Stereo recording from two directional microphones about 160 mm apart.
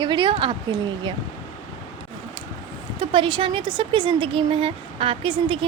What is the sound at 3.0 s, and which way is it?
A woman's voice, 30° right (ahead or behind).